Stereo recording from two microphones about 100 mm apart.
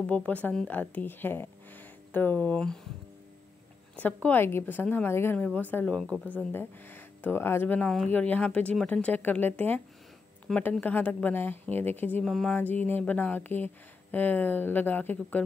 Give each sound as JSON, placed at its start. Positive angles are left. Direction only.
{"t": 0.0, "sound": "speech", "side_deg": 10}
{"t": 3.9, "sound": "speech", "side_deg": 15}
{"t": 12.3, "sound": "a sound", "side_deg": 5}
{"t": 12.5, "sound": "speech", "side_deg": 15}